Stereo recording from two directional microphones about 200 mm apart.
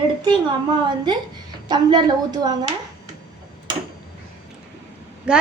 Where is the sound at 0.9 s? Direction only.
20° right (ahead or behind).